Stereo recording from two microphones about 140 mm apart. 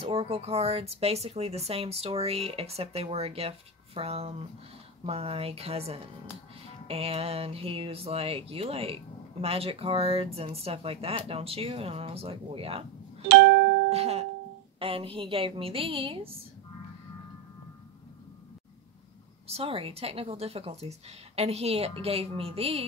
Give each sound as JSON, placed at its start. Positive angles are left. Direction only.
{"t": 0.0, "sound": "speech", "side_deg": -40}
{"t": 13.8, "sound": "music", "side_deg": -50}
{"t": 14.8, "sound": "a woman's voice", "side_deg": -40}
{"t": 19.4, "sound": "speech", "side_deg": -45}